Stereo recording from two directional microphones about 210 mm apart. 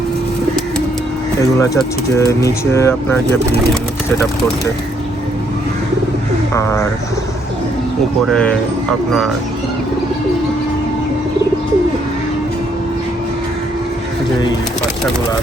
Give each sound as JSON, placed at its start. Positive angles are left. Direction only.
{"t": 1.4, "sound": "speech", "side_deg": 15}
{"t": 6.5, "sound": "speech", "side_deg": 15}
{"t": 8.3, "sound": "speech", "side_deg": 5}